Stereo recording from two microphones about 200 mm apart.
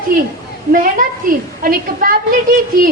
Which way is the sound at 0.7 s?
45° right (ahead or behind).